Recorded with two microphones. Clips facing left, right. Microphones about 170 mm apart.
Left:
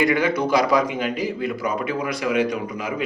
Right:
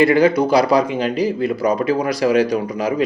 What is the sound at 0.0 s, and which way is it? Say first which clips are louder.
Speech: right 6 dB; 30° right (ahead or behind).